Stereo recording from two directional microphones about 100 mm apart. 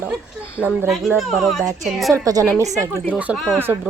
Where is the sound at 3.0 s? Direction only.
15° right (ahead or behind).